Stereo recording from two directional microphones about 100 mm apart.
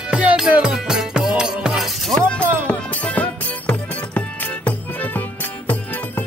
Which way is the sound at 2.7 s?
15° left (ahead or behind).